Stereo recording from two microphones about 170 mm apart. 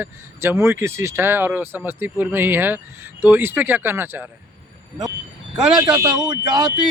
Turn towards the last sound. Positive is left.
turn(degrees=-25)  # may be behind; listen again after turning